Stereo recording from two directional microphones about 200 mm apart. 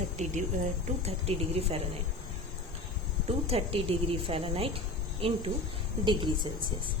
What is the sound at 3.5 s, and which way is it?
A woman's voice, 30° right (ahead or behind).